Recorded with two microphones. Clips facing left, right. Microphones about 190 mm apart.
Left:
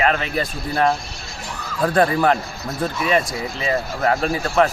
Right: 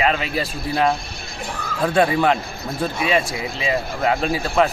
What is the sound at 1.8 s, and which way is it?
Speech, centre (ahead or behind).